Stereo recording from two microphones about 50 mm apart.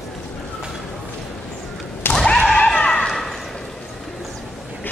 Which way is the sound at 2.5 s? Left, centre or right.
Left.